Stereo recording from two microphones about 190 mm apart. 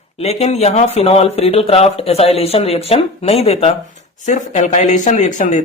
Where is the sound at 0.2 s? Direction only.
35° left (ahead or behind).